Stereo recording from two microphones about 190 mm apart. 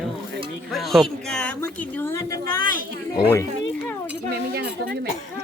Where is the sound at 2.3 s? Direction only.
50° right (ahead or behind).